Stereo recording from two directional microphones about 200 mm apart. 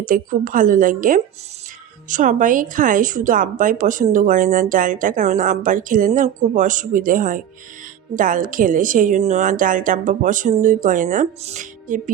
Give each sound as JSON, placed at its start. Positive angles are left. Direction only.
{"t": 0.0, "sound": "a woman's voice", "side_deg": -40}